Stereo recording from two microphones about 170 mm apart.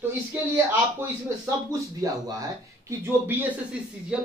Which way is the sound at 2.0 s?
20° right (ahead or behind).